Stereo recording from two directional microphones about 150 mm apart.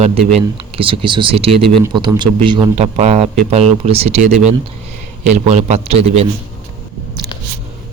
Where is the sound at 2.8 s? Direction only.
45° right (ahead or behind).